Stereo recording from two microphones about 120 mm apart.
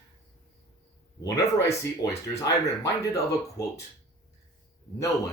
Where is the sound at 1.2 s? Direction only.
30° left (ahead or behind).